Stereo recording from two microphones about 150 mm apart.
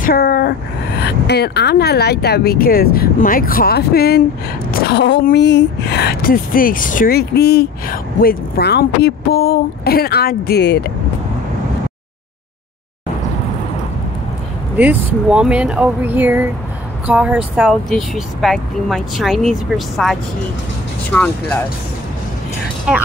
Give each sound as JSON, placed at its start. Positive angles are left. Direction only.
{"t": 0.0, "sound": "a woman's voice", "side_deg": 85}
{"t": 15.2, "sound": "speech", "side_deg": -5}
{"t": 22.9, "sound": "speech", "side_deg": -5}